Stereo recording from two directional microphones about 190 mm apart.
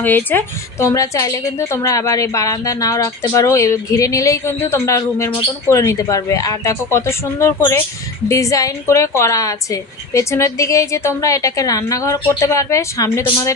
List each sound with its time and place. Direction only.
0.0 s a woman's voice: 10° left (ahead or behind)